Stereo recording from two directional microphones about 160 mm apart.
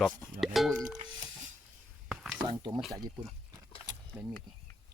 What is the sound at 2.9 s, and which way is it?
Speech, 25° right (ahead or behind).